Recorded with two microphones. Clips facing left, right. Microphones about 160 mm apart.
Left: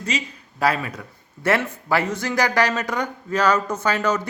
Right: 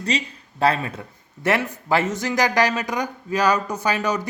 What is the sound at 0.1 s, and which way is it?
Speech, 35° right (ahead or behind).